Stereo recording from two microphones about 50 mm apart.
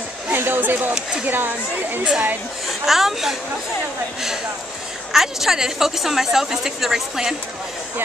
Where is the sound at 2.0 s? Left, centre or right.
Right.